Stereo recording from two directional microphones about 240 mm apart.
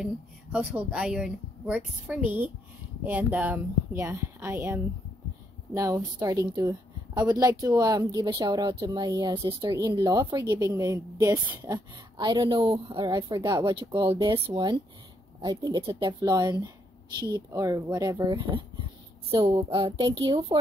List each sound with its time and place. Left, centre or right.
0.0 s a woman's voice: centre; by 20.5 s right